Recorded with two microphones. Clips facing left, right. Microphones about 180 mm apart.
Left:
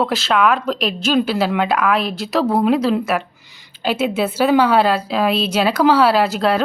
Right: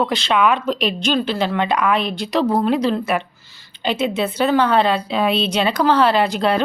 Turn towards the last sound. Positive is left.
turn(degrees=0)  # may be behind; listen again after turning